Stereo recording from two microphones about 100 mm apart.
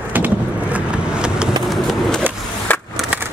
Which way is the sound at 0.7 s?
10° right (ahead or behind).